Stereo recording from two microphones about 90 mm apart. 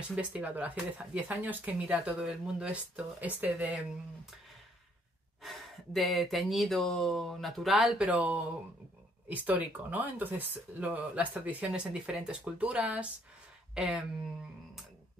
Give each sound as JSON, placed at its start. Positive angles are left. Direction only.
{"t": 0.1, "sound": "speech", "side_deg": -15}
{"t": 5.4, "sound": "speech", "side_deg": 0}
{"t": 8.1, "sound": "speech", "side_deg": -15}